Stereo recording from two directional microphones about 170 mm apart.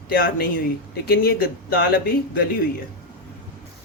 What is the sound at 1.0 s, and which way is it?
Speech, 65° left (ahead or behind).